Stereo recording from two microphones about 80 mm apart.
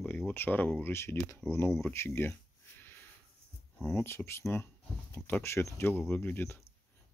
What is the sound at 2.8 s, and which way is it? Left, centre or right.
Sniff, left.